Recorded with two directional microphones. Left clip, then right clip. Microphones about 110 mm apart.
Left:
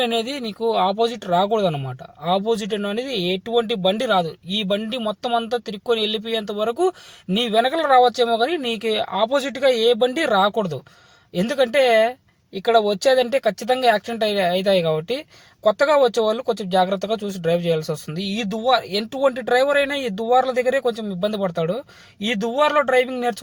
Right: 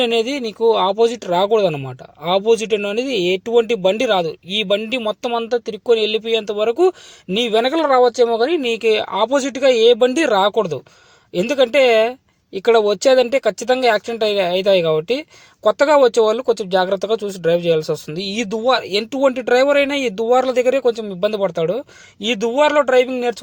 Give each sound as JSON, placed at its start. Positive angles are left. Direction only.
{"t": 0.0, "sound": "speech", "side_deg": -15}